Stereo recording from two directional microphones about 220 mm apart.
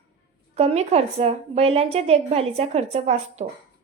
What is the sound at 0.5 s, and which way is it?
A woman's voice, 30° right (ahead or behind).